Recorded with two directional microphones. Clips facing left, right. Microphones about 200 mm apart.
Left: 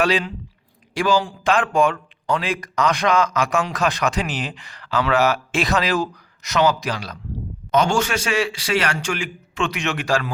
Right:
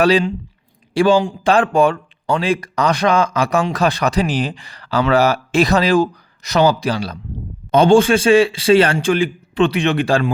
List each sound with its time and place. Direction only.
0.0 s speech: 30° right (ahead or behind)